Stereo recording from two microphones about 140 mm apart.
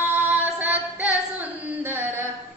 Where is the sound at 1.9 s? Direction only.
15° right (ahead or behind).